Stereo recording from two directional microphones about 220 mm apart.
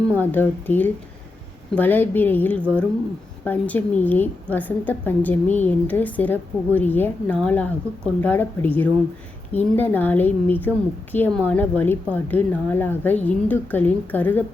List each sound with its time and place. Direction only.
0.2 s a woman's voice: 10° left (ahead or behind)